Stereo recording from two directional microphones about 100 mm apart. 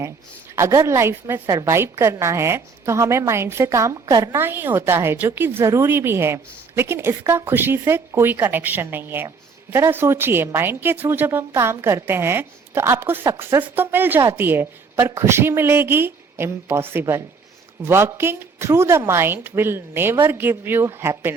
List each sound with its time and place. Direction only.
0.5 s a woman's voice: 30° right (ahead or behind)